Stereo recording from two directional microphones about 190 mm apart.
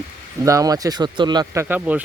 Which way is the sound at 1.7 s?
10° right (ahead or behind).